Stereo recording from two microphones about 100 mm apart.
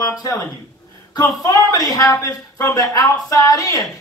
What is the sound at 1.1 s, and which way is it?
Speech, 40° left (ahead or behind).